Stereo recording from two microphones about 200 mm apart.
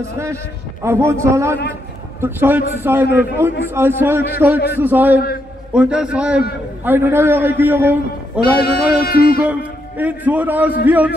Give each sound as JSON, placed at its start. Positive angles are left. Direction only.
{"t": 0.0, "sound": "a man's voice", "side_deg": -15}
{"t": 8.4, "sound": "music", "side_deg": 50}
{"t": 9.5, "sound": "a man's voice", "side_deg": -5}